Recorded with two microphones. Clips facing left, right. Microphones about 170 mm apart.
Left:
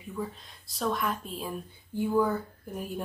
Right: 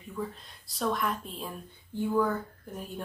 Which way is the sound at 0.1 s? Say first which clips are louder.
Left 1 dB; centre (ahead or behind).